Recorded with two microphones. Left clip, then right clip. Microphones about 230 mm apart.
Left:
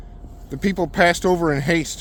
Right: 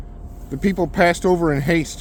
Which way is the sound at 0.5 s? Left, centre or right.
Left.